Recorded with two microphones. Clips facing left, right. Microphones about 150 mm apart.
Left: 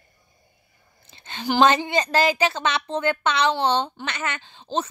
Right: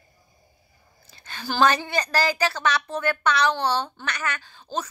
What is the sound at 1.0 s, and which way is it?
A woman's voice, 25° left (ahead or behind).